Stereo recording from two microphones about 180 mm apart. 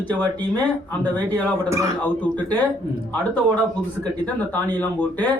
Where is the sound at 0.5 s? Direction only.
10° left (ahead or behind).